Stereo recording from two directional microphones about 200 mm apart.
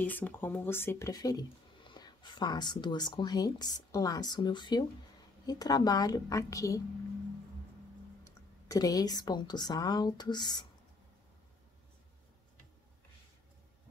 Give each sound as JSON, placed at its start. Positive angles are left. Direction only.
{"t": 0.0, "sound": "speech", "side_deg": 10}
{"t": 8.2, "sound": "speech", "side_deg": 15}